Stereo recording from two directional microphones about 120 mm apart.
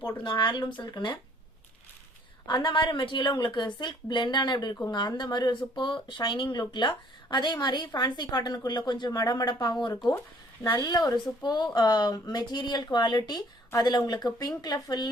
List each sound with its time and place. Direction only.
0.2 s speech: 40° left (ahead or behind)
2.5 s speech: 40° left (ahead or behind)